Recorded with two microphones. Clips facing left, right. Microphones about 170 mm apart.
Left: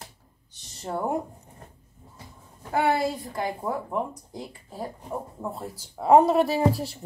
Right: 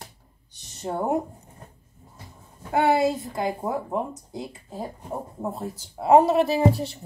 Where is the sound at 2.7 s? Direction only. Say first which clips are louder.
Right 3 dB; 25° right (ahead or behind).